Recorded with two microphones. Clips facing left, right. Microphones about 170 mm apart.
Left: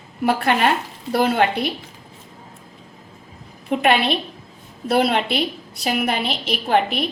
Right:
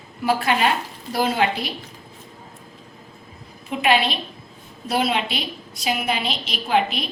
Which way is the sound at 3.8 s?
60° left (ahead or behind).